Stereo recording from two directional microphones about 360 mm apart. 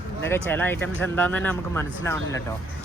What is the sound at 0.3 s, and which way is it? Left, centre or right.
Speech, centre.